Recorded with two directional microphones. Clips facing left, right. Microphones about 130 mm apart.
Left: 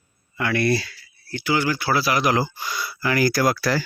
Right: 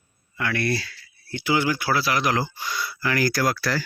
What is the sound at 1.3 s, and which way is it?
Speech, 20° right (ahead or behind).